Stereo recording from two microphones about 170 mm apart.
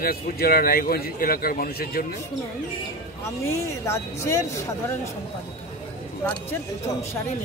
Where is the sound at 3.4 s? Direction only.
15° left (ahead or behind).